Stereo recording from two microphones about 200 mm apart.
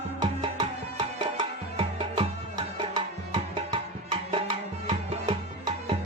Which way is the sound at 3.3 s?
20° right (ahead or behind).